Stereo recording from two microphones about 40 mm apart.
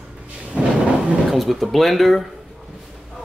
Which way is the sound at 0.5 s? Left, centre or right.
Right.